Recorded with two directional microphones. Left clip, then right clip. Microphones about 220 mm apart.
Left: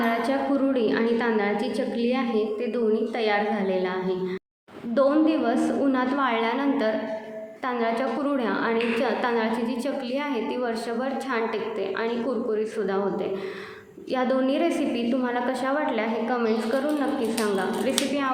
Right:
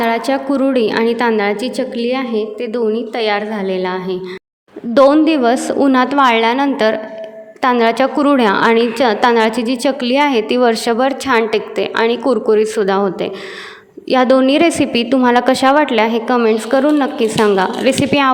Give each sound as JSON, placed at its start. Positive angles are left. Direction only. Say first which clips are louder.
{"t": 0.0, "sound": "a woman's voice", "louder": "right 9 dB", "side_deg": -45}